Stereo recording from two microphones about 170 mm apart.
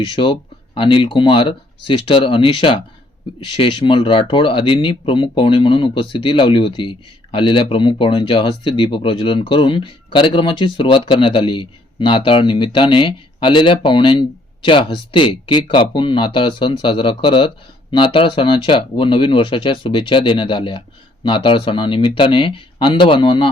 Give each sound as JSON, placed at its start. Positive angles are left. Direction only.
{"t": 0.0, "sound": "speech", "side_deg": 30}